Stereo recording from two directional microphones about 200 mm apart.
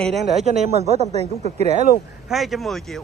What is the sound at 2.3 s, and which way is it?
Speech, centre (ahead or behind).